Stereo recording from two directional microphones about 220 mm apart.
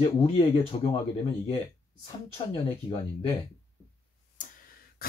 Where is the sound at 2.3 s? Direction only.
25° left (ahead or behind).